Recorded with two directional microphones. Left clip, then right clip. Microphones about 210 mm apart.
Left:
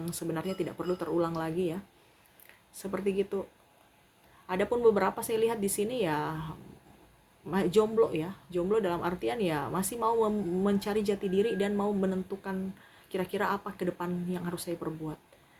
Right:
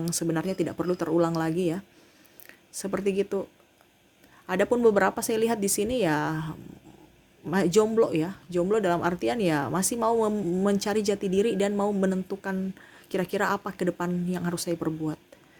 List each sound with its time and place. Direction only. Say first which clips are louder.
0.0 s speech: right 6 dB; 50° right (ahead or behind)
4.4 s speech: right 4 dB; 50° right (ahead or behind)
7.5 s speech: right 4 dB; 50° right (ahead or behind)